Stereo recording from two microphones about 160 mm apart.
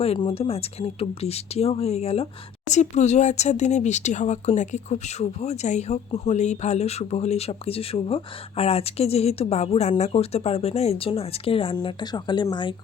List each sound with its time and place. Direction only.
0.0 s speech: 35° left (ahead or behind)